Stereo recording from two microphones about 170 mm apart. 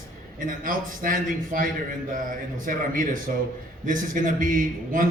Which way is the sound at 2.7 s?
55° right (ahead or behind).